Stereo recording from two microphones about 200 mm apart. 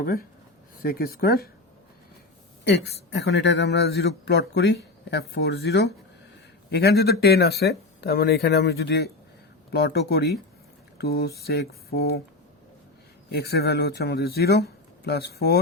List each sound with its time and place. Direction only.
0.0 s speech: 45° left (ahead or behind)
2.6 s a man's voice: 60° left (ahead or behind)
13.3 s speech: 55° left (ahead or behind)